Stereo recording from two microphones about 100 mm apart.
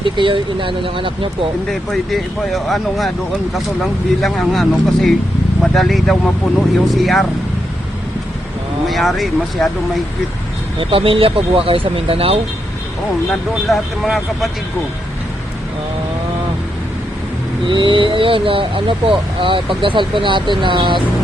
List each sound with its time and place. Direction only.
0.0 s speech: 55° right (ahead or behind)
1.7 s speech: centre (ahead or behind)
4.2 s speech: centre (ahead or behind)
8.9 s speech: centre (ahead or behind)
10.8 s speech: 65° right (ahead or behind)
13.7 s speech: centre (ahead or behind)
17.7 s speech: 55° right (ahead or behind)